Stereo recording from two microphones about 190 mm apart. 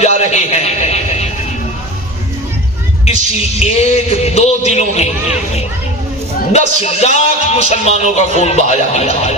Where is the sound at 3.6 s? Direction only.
35° left (ahead or behind).